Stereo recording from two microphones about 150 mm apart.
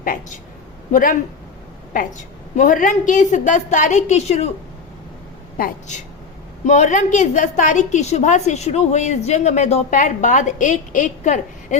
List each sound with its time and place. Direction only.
0.0 s a woman's voice: 65° left (ahead or behind)
2.6 s a woman's voice: 60° left (ahead or behind)
5.5 s a woman's voice: 70° left (ahead or behind)
6.7 s a woman's voice: 55° left (ahead or behind)